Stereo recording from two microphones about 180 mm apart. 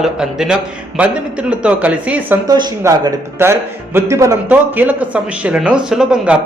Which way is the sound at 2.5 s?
20° right (ahead or behind).